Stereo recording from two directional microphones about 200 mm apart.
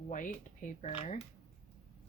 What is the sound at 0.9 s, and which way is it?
Speech, 30° left (ahead or behind).